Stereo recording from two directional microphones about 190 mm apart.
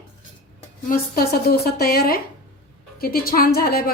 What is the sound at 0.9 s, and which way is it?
A woman's voice, 50° left (ahead or behind).